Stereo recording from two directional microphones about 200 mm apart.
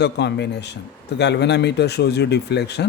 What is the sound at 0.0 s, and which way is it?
Speech, 60° left (ahead or behind).